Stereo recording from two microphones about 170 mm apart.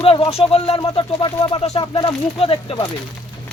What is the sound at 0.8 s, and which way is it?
A man's voice, 25° left (ahead or behind).